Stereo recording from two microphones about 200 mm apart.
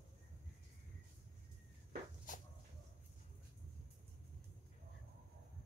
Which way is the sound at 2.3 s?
40° left (ahead or behind).